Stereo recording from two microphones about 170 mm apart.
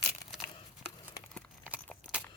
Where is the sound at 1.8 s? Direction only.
5° left (ahead or behind).